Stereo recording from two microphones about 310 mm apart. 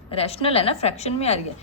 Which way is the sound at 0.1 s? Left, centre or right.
Centre.